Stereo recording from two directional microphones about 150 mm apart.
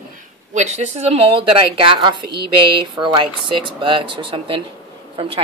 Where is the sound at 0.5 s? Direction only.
50° right (ahead or behind).